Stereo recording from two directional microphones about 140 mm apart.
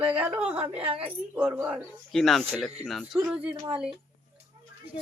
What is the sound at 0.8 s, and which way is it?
Speech, 45° right (ahead or behind).